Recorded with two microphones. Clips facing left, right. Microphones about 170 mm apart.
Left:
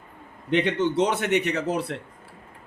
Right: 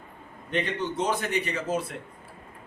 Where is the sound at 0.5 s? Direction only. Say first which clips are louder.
Left 7 dB; 80° left.